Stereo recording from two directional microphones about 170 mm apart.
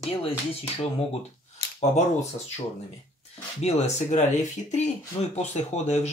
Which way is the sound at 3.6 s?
40° left (ahead or behind).